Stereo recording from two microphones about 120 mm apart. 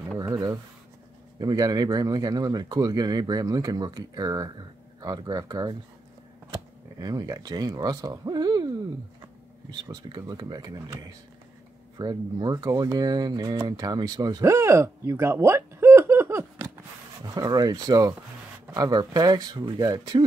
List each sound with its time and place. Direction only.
0.3 s speech: 30° right (ahead or behind)